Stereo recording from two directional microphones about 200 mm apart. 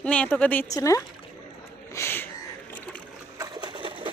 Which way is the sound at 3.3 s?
20° right (ahead or behind).